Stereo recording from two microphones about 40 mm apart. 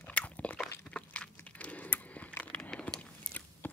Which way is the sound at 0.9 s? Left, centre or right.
Left.